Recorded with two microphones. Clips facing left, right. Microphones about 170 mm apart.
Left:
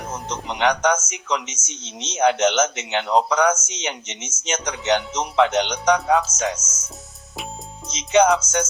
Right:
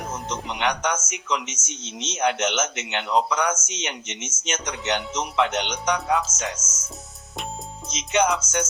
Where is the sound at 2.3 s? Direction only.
Centre (ahead or behind).